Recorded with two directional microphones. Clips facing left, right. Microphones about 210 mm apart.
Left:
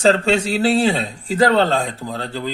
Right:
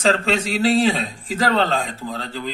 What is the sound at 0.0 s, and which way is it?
Speech, 35° left (ahead or behind).